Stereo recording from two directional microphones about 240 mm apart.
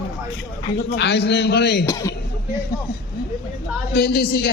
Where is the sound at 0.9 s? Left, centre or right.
Left.